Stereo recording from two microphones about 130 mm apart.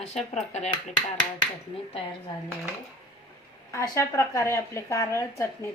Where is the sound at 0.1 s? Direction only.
60° left (ahead or behind).